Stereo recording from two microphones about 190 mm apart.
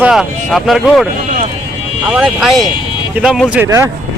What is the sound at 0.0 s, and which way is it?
Speech, centre (ahead or behind).